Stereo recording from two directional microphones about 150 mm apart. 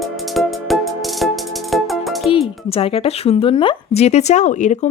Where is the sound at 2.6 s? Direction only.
40° left (ahead or behind).